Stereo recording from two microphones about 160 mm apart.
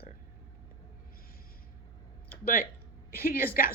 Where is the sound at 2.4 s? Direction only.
65° left (ahead or behind).